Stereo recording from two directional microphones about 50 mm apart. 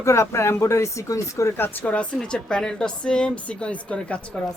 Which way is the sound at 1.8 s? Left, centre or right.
Left.